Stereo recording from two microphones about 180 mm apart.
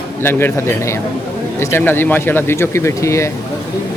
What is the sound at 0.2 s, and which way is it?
Speech, 15° left (ahead or behind).